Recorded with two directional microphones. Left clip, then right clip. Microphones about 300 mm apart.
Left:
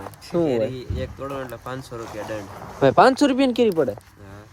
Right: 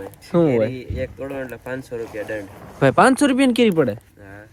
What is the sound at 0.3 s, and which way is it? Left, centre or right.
Speech, centre.